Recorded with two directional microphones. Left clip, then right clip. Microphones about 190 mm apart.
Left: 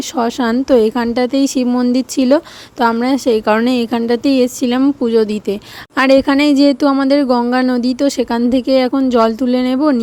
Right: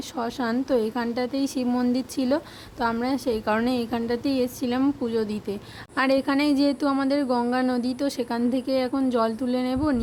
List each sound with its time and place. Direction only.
0.2 s a woman's voice: 40° left (ahead or behind)